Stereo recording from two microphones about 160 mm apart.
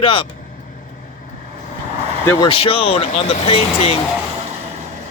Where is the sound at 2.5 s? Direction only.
35° left (ahead or behind).